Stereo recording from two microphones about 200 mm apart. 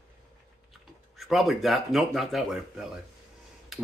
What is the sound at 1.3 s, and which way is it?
Speech, centre (ahead or behind).